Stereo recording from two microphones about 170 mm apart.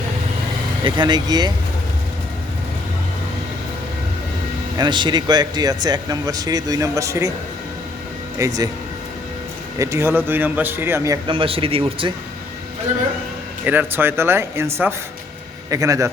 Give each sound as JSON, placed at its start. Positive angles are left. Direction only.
{"t": 0.9, "sound": "speech", "side_deg": -25}
{"t": 4.8, "sound": "speech", "side_deg": -25}
{"t": 8.4, "sound": "speech", "side_deg": -20}
{"t": 9.7, "sound": "a man's voice", "side_deg": -20}
{"t": 11.3, "sound": "speech", "side_deg": -30}
{"t": 13.7, "sound": "a man's voice", "side_deg": -10}